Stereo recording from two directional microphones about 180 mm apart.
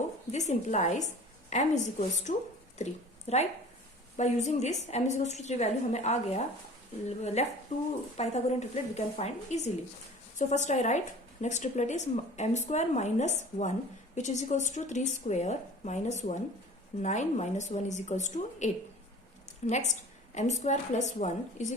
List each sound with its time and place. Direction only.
0.3 s a woman's voice: 40° left (ahead or behind)